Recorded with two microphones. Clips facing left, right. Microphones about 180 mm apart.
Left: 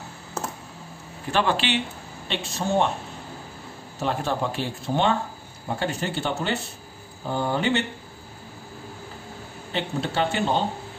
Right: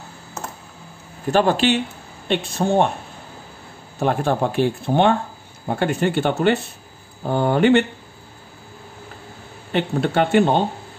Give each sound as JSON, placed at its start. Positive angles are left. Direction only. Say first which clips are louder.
{"t": 1.3, "sound": "speech", "louder": "right 6 dB", "side_deg": -45}
{"t": 2.2, "sound": "speech", "louder": "right 7 dB", "side_deg": -55}
{"t": 4.0, "sound": "speech", "louder": "right 6 dB", "side_deg": -55}
{"t": 9.7, "sound": "speech", "louder": "right 7 dB", "side_deg": -60}